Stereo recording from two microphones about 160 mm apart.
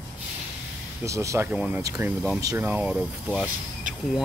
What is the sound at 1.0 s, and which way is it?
Speech, 20° right (ahead or behind).